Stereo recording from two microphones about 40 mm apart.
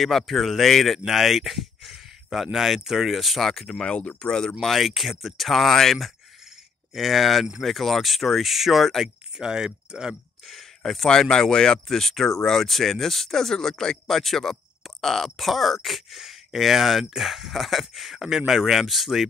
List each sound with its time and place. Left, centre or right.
0.0 s speech: centre
3.6 s speech: centre
4.6 s speech: centre
9.4 s speech: centre
10.4 s a sound: centre
11.1 s speech: centre